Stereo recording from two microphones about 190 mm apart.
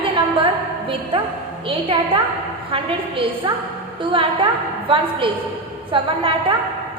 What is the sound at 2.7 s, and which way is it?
A woman's voice, 30° right (ahead or behind).